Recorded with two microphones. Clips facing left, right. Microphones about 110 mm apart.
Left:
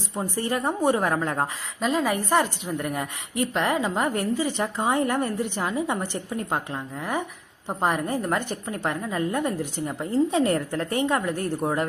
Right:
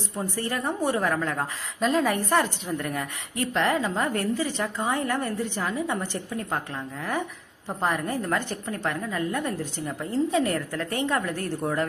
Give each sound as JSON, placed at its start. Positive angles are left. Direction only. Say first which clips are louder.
{"t": 0.2, "sound": "a woman's voice", "louder": "left 3 dB", "side_deg": 20}
{"t": 1.8, "sound": "a woman's voice", "louder": "right 1 dB", "side_deg": 5}